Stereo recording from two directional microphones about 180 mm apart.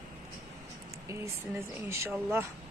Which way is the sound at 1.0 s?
15° right (ahead or behind).